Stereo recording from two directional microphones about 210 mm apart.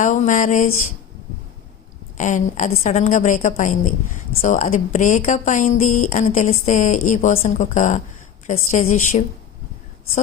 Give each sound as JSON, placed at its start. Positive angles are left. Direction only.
{"t": 0.0, "sound": "a woman's voice", "side_deg": 35}
{"t": 2.1, "sound": "a woman's voice", "side_deg": 35}